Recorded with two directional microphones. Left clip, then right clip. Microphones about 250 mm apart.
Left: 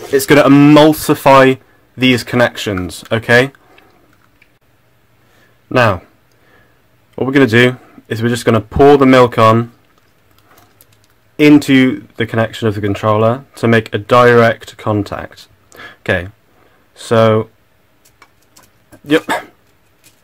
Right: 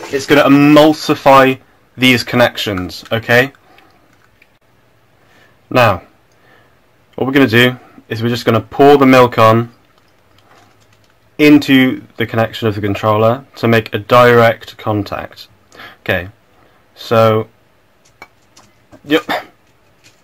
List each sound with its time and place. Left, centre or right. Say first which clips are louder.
0.3 s speech: left 1 dB; left
5.7 s speech: right 1 dB; left
7.2 s speech: even; left
11.3 s speech: even; left
18.9 s speech: left 1 dB; left